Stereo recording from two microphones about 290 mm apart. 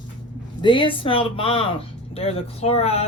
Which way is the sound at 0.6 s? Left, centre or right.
Centre.